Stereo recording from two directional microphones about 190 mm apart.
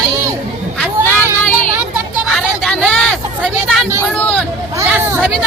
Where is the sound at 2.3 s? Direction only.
Centre (ahead or behind).